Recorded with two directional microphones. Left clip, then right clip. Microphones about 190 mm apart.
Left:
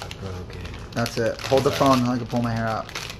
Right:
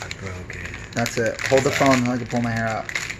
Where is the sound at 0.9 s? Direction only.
20° right (ahead or behind).